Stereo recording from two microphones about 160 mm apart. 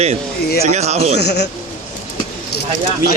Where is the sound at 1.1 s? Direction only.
90° left.